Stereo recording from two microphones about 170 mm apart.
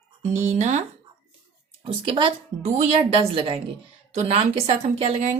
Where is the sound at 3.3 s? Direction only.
30° right (ahead or behind).